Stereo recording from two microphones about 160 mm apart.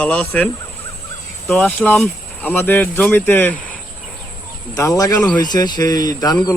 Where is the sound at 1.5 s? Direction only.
10° left (ahead or behind).